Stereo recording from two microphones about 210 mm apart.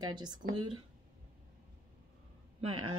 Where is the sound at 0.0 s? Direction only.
20° right (ahead or behind).